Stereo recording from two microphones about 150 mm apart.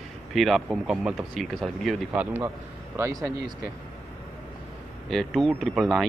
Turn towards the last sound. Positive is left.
turn(degrees=0)  # may be behind; listen again after turning